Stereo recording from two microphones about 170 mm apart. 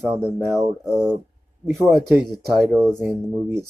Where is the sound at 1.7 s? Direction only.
Centre (ahead or behind).